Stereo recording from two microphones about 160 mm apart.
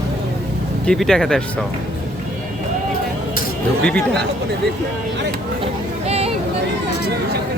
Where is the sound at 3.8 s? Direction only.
5° left (ahead or behind).